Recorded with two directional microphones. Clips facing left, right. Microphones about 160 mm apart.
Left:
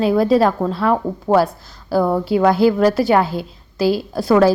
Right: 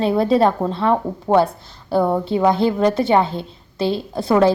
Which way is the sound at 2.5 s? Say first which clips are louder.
Left 3 dB; 5° left (ahead or behind).